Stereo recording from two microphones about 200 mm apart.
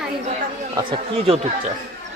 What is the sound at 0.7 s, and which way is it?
Speech, 25° right (ahead or behind).